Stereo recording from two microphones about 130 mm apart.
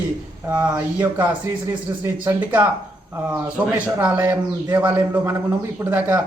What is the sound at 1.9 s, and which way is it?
Speech, 25° right (ahead or behind).